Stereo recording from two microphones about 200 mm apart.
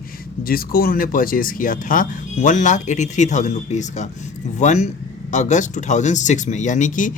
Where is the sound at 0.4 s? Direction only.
50° left (ahead or behind).